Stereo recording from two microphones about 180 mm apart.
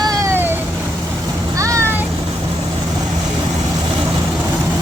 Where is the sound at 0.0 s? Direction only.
20° right (ahead or behind).